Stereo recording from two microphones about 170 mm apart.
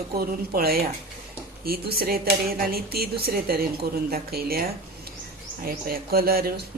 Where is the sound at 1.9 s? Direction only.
60° right (ahead or behind).